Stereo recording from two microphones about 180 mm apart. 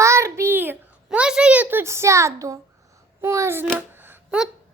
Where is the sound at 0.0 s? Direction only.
15° right (ahead or behind).